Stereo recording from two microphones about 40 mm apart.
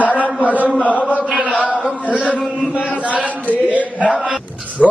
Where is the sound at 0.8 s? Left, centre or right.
Left.